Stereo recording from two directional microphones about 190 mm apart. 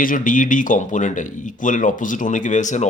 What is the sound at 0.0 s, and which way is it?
Speech, 45° left (ahead or behind).